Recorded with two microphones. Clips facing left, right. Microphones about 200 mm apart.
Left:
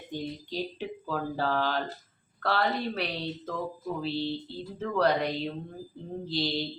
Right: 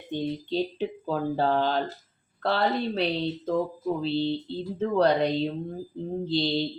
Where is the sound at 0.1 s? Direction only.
25° right (ahead or behind).